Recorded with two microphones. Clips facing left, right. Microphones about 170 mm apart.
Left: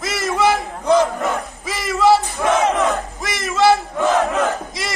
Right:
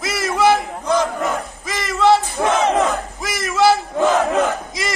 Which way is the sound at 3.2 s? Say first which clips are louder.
Right 1 dB; centre (ahead or behind).